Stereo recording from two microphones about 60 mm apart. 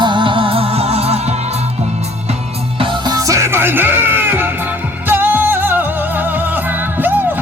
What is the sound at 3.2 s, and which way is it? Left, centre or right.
Music, right.